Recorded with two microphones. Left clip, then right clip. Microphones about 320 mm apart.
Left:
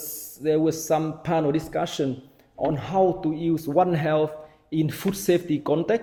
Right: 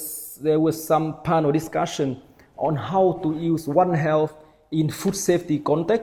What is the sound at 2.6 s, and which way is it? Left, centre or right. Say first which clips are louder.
Speech: right 1 dB; right.